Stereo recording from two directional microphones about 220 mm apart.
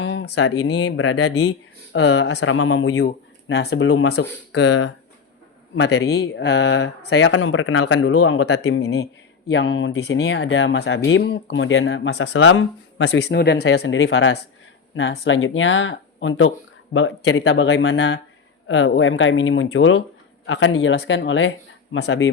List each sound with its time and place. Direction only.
0.0 s a sound: 55° left (ahead or behind)
0.7 s speech: 55° left (ahead or behind); by 3.0 s 75° left (ahead or behind)
3.0 s speech: 50° left (ahead or behind)
13.7 s speech: 60° left (ahead or behind)